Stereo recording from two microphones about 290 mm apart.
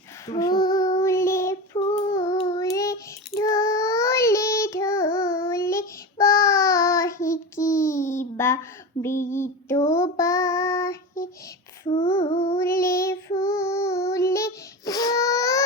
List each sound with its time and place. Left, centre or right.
0.3 s child singing: centre
11.9 s female singing: centre
12.5 s child singing: centre